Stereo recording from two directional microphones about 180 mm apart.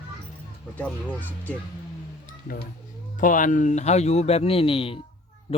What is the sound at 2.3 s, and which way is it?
Music, 55° left (ahead or behind).